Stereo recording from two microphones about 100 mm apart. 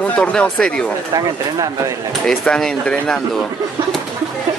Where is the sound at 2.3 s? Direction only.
5° left (ahead or behind).